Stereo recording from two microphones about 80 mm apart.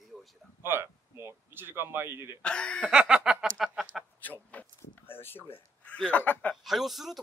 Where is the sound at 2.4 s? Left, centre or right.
Centre.